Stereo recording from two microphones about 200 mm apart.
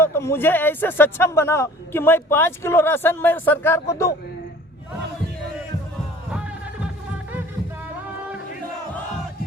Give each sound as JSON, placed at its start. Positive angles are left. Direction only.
{"t": 0.0, "sound": "speech", "side_deg": 10}